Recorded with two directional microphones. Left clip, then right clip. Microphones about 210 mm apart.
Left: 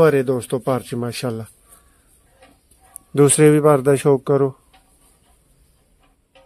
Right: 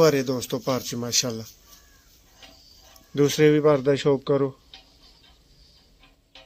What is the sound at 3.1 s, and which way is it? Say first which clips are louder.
Speech: left 6 dB; 55° left (ahead or behind).